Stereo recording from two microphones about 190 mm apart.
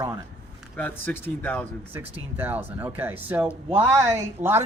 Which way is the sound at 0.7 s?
10° left (ahead or behind).